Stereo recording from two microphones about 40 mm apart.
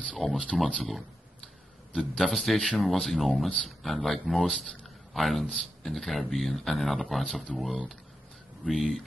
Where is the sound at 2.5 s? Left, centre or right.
Centre.